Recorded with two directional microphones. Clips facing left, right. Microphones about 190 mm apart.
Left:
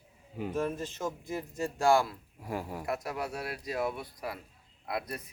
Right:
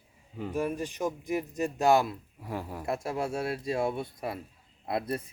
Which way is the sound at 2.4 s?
Centre (ahead or behind).